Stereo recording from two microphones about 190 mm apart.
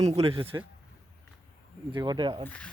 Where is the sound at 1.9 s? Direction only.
25° right (ahead or behind).